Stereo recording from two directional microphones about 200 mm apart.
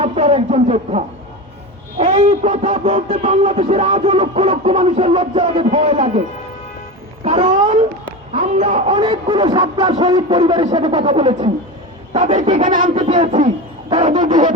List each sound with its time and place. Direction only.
0.0 s speech: 30° right (ahead or behind)
7.3 s a man's voice: 25° right (ahead or behind)
10.4 s a man's voice: 30° right (ahead or behind)